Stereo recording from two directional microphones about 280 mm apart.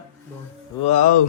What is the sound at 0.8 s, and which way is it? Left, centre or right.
Speech, left.